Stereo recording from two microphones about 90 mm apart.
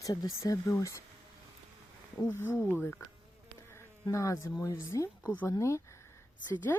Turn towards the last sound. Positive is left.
turn(degrees=20)  # may be behind; listen again after turning